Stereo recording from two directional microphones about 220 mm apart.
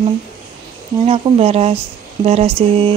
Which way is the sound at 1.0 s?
25° right (ahead or behind).